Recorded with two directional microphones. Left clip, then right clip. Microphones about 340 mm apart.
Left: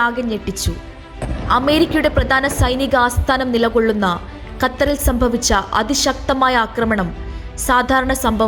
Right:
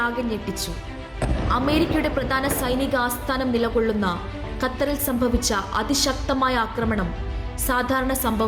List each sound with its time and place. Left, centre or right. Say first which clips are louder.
0.0 s a woman's voice: left 6 dB; centre
1.2 s music: even; centre
1.5 s a woman's voice: left 8 dB; centre